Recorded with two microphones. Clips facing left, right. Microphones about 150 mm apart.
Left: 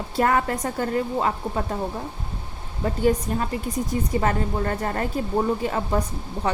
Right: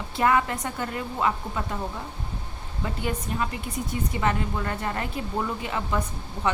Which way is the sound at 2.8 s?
40° left (ahead or behind).